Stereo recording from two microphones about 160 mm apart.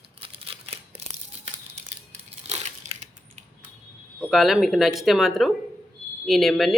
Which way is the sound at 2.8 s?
50° right (ahead or behind).